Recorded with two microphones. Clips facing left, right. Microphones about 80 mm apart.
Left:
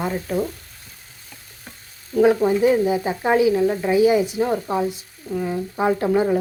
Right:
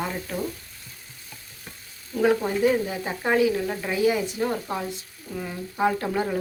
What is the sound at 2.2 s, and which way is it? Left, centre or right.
Speech, left.